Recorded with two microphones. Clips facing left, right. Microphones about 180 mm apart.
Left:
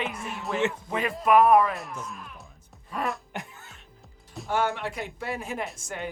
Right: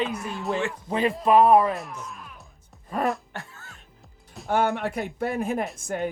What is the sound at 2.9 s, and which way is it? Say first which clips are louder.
Music: right 5 dB; 45° right (ahead or behind).